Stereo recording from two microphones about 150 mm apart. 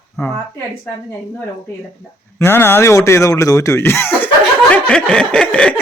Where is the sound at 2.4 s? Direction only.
15° left (ahead or behind).